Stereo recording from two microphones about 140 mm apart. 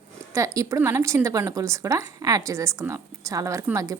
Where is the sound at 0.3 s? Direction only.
25° right (ahead or behind).